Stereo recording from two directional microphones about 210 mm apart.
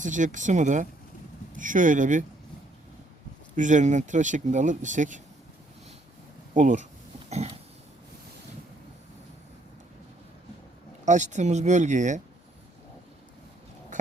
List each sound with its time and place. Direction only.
0.0 s speech: 35° right (ahead or behind)
3.5 s speech: 35° right (ahead or behind)
6.5 s speech: 35° right (ahead or behind)
7.3 s a sound: 30° right (ahead or behind)
11.0 s speech: 35° right (ahead or behind)